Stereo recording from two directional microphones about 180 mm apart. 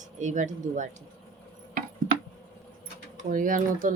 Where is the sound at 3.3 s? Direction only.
50° right (ahead or behind).